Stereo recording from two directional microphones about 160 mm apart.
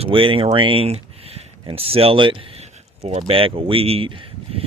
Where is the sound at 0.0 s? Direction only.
35° right (ahead or behind).